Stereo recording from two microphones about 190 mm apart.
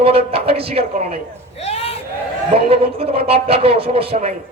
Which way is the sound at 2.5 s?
30° right (ahead or behind).